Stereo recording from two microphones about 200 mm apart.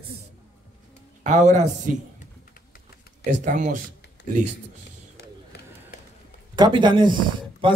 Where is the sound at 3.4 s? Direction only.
40° right (ahead or behind).